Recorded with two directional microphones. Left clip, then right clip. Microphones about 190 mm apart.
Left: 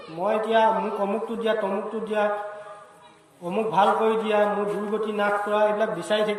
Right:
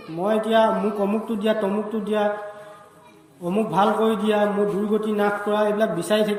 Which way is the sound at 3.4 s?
25° right (ahead or behind).